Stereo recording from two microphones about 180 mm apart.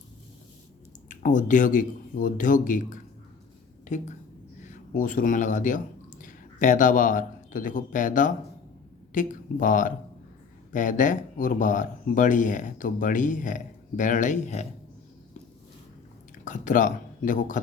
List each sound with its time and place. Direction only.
1.0 s speech: 45° left (ahead or behind)
16.4 s speech: 45° left (ahead or behind)